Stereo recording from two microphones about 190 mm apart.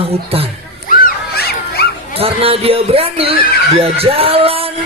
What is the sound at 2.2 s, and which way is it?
A woman's voice, 30° right (ahead or behind).